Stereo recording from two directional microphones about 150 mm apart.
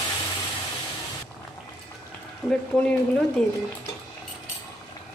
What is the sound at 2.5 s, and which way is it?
Speech, 5° left (ahead or behind).